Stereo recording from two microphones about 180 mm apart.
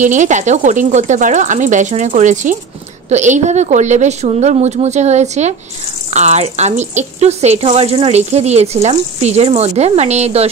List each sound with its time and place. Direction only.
0.0 s speech: 45° right (ahead or behind)